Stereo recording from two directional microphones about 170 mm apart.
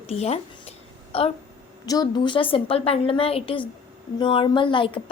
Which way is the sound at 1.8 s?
25° left (ahead or behind).